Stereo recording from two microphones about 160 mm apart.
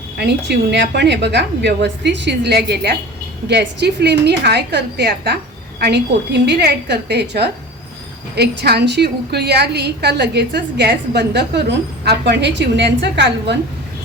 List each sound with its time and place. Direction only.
0.2 s a woman's voice: 90° right